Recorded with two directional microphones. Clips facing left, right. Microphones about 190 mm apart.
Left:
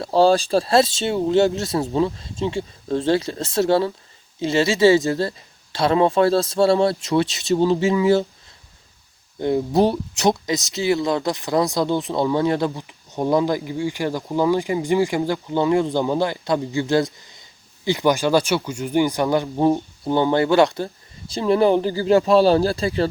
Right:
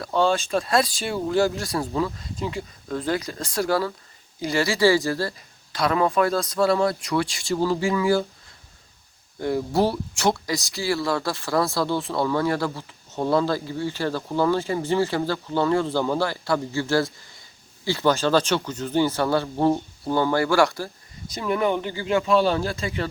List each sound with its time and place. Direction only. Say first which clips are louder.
0.0 s speech: left 6 dB; 35° left (ahead or behind)
9.4 s speech: left 4 dB; 20° left (ahead or behind)